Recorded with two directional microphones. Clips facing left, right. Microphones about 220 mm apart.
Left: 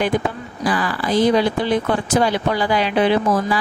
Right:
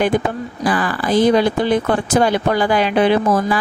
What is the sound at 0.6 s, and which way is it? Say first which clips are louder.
Speech: right 2 dB; 50° right (ahead or behind).